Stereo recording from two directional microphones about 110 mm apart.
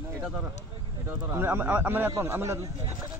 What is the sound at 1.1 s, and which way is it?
Speech, 20° right (ahead or behind).